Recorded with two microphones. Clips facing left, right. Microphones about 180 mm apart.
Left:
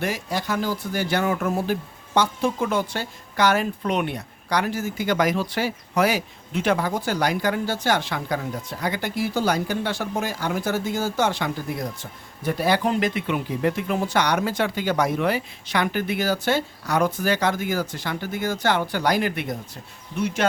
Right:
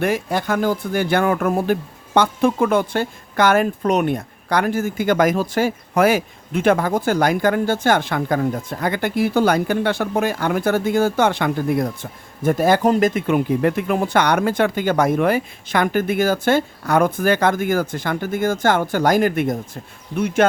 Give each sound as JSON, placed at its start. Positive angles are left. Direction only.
{"t": 0.0, "sound": "speech", "side_deg": -55}
{"t": 12.4, "sound": "speech", "side_deg": -50}